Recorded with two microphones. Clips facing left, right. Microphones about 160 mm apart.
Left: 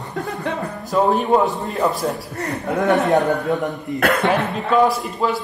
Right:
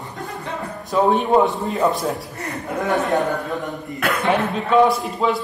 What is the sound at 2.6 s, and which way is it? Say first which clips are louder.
Speech: left 4 dB; 65° left (ahead or behind).